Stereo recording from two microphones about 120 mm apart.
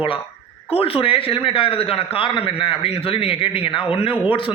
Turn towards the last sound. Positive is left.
turn(degrees=45)  # may be behind; listen again after turning